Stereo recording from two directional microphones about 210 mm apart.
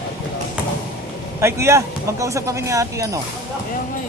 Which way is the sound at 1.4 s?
15° right (ahead or behind).